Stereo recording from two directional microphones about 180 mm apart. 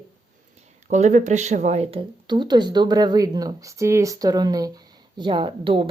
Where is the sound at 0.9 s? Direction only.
40° right (ahead or behind).